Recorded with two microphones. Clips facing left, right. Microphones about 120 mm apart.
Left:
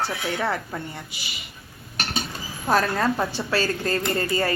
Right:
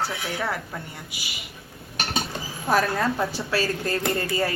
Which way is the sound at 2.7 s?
Centre (ahead or behind).